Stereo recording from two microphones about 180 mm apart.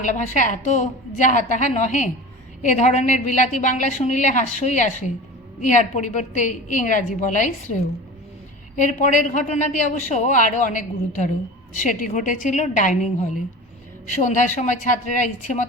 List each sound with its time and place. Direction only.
0.0 s a man's voice: 45° left (ahead or behind)
14.1 s a man's voice: 45° left (ahead or behind)